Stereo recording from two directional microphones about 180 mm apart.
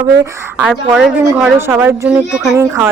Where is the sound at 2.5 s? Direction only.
15° right (ahead or behind).